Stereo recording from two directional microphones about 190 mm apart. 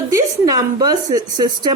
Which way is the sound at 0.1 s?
15° right (ahead or behind).